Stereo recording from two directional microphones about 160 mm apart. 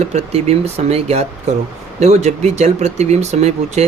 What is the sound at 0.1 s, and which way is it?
Speech, 40° right (ahead or behind).